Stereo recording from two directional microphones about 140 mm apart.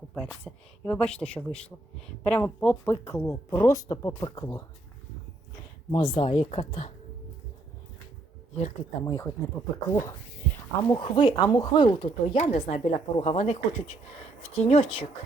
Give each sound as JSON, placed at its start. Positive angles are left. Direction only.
{"t": 0.4, "sound": "speech", "side_deg": 10}
{"t": 3.6, "sound": "speech", "side_deg": 30}
{"t": 5.9, "sound": "speech", "side_deg": 35}
{"t": 8.5, "sound": "speech", "side_deg": 55}
{"t": 9.0, "sound": "speech", "side_deg": 25}
{"t": 10.8, "sound": "speech", "side_deg": 35}
{"t": 12.4, "sound": "speech", "side_deg": 55}